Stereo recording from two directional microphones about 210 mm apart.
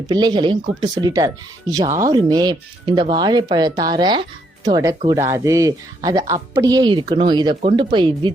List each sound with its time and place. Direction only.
0.1 s speech: 20° right (ahead or behind)